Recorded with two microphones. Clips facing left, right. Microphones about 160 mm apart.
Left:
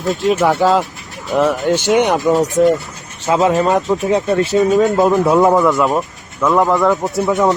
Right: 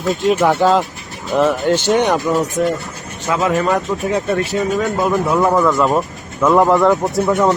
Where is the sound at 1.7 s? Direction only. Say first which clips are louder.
Left 1 dB; 15° left (ahead or behind).